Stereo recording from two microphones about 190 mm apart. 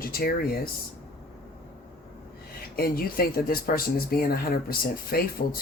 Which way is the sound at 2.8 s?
50° left (ahead or behind).